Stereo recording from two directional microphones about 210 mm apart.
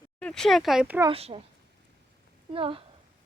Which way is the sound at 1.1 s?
30° right (ahead or behind).